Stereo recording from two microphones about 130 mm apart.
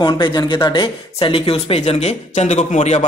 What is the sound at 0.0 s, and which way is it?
Speech, 35° left (ahead or behind).